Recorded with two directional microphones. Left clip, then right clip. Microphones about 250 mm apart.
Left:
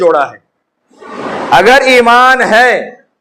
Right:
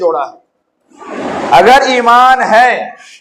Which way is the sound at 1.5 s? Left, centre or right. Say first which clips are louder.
Left 1 dB; left.